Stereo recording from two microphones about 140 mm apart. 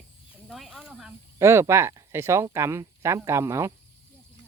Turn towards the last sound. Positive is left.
turn(degrees=-20)  # may be behind; listen again after turning